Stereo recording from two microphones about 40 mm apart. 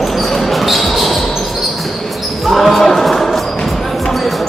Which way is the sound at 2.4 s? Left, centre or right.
Centre.